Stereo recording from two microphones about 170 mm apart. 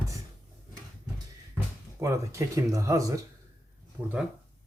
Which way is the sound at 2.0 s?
20° right (ahead or behind).